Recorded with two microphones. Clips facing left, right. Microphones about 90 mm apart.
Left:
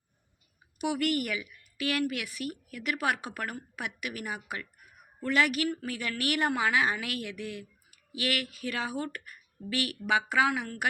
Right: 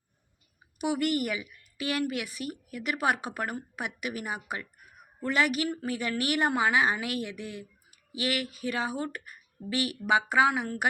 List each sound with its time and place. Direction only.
0.8 s a woman's voice: 30° right (ahead or behind)